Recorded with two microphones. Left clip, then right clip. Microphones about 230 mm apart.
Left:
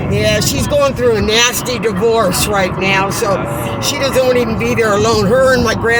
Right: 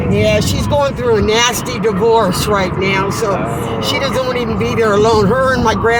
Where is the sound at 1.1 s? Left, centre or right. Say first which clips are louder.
Even; left.